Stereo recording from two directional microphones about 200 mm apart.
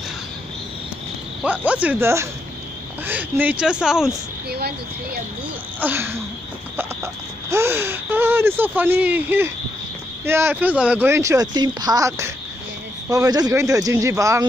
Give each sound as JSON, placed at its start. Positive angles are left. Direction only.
{"t": 1.4, "sound": "speech", "side_deg": -5}
{"t": 4.5, "sound": "speech", "side_deg": -55}
{"t": 5.8, "sound": "speech", "side_deg": -10}
{"t": 7.5, "sound": "speech", "side_deg": -10}